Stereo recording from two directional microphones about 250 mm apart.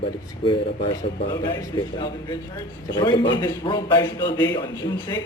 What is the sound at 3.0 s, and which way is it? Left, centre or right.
Speech, centre.